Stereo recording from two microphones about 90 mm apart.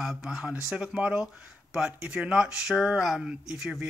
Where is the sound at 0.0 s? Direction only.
5° right (ahead or behind).